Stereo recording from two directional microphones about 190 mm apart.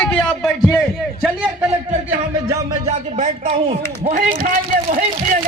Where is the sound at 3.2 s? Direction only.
35° right (ahead or behind).